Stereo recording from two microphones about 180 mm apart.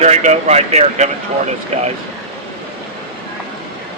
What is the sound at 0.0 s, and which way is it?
Speech, 40° right (ahead or behind).